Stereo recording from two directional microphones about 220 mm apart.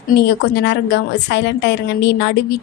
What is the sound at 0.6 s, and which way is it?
A woman's voice, 50° left (ahead or behind).